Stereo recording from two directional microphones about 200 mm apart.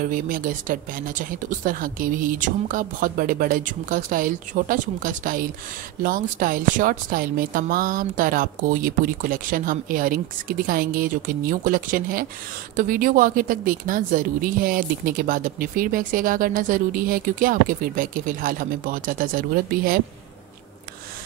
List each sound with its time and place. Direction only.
0.0 s a woman's voice: 45° right (ahead or behind)